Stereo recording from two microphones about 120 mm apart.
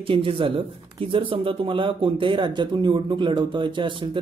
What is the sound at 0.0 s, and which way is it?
A man's voice, 45° right (ahead or behind).